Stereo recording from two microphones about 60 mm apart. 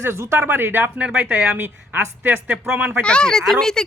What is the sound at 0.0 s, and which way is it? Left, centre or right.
Speech, right.